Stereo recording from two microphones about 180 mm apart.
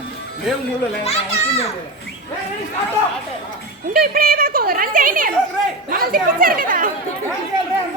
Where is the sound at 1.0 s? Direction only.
35° left (ahead or behind).